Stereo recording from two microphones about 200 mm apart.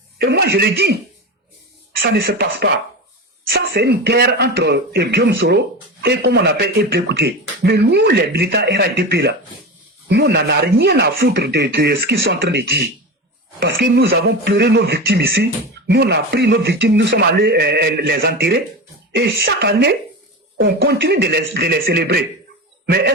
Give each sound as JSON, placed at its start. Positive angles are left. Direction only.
{"t": 0.2, "sound": "speech", "side_deg": -55}
{"t": 2.0, "sound": "speech", "side_deg": -55}